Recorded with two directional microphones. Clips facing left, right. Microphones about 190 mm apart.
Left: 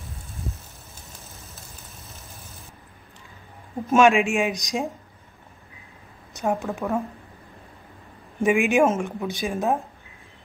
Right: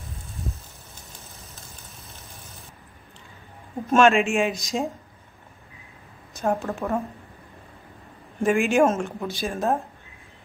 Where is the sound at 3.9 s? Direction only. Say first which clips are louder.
Left 1 dB; 15° left (ahead or behind).